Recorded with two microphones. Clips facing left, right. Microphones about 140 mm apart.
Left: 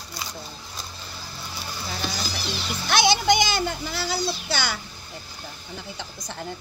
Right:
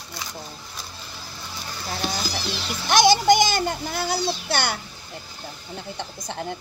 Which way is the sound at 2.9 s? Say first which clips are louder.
Right 4 dB; 50° right (ahead or behind).